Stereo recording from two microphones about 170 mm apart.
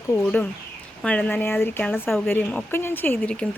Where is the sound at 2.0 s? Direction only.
Centre (ahead or behind).